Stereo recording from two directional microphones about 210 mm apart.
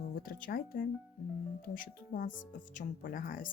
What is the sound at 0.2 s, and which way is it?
Speech, 45° left (ahead or behind).